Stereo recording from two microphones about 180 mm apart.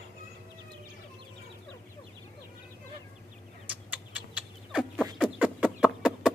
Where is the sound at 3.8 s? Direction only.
5° right (ahead or behind).